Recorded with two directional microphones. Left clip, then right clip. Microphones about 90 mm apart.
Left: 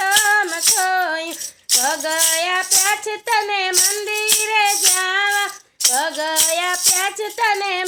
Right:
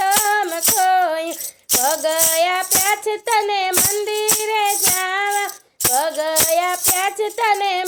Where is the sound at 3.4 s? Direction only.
60° right (ahead or behind).